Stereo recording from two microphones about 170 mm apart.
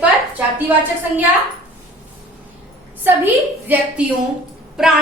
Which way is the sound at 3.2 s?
10° right (ahead or behind).